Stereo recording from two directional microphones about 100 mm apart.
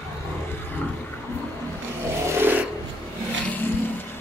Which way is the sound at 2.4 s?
20° right (ahead or behind).